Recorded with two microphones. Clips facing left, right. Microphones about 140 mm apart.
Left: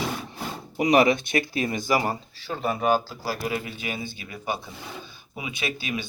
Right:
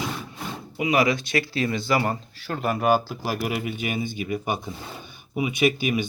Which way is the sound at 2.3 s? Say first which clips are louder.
Right 2 dB; centre (ahead or behind).